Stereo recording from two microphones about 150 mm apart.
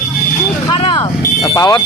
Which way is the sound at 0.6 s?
30° left (ahead or behind).